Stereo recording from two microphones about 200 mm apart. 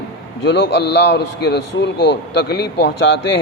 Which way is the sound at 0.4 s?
60° left (ahead or behind).